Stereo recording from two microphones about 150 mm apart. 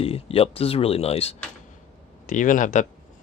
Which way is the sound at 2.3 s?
60° left (ahead or behind).